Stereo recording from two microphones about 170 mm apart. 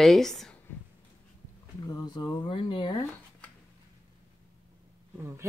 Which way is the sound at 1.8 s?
25° left (ahead or behind).